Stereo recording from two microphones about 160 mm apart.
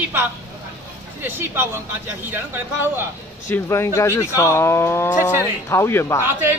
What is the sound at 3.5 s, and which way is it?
Speech, 15° left (ahead or behind).